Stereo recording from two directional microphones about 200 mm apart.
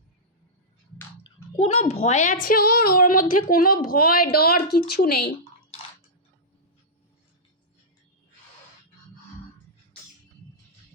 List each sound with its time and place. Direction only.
1.5 s a woman's voice: 30° left (ahead or behind); by 5.2 s 50° left (ahead or behind)